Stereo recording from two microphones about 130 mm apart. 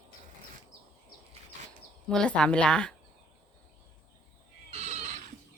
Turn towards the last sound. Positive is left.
turn(degrees=-65)  # may be behind; listen again after turning